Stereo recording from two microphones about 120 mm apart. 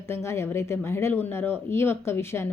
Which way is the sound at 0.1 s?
20° left (ahead or behind).